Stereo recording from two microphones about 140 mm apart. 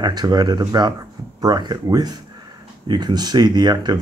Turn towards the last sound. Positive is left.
turn(degrees=-30)  # may be behind; listen again after turning